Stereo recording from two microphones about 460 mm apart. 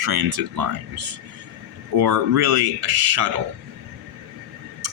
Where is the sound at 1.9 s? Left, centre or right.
Right.